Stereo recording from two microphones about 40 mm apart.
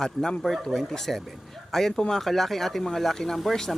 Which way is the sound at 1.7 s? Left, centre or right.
Centre.